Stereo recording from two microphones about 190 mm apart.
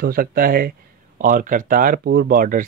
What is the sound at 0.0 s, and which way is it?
Speech, 50° right (ahead or behind).